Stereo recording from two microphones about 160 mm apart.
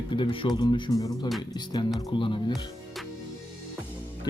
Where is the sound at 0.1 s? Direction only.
30° left (ahead or behind).